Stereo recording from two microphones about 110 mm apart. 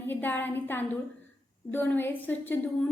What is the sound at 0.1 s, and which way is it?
A woman's voice, 15° left (ahead or behind).